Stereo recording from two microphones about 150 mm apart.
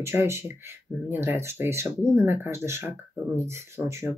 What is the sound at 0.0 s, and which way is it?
Speech, 15° right (ahead or behind).